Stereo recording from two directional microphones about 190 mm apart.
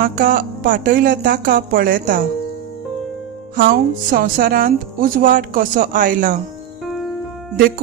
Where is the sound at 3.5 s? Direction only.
50° right (ahead or behind).